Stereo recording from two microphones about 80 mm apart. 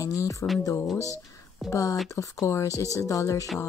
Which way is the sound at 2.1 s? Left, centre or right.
Left.